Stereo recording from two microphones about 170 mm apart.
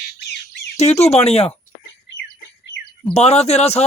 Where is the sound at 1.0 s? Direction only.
40° left (ahead or behind).